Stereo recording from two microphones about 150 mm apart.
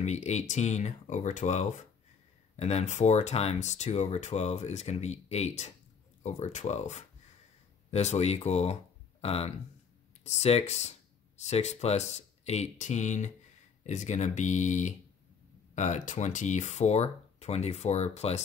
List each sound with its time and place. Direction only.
0.0 s speech: 50° left (ahead or behind)